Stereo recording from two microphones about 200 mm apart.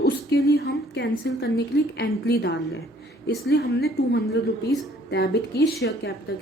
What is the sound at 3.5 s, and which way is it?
A woman's voice, 55° left (ahead or behind).